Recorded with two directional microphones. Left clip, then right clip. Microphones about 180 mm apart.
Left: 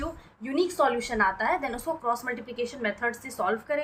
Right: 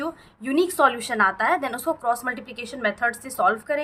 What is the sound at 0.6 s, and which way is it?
A woman's voice, 45° right (ahead or behind).